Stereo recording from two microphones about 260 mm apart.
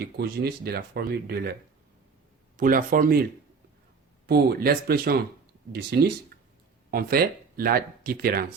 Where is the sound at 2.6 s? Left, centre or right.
Right.